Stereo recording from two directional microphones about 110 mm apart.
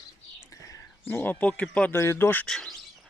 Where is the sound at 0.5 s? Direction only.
30° left (ahead or behind).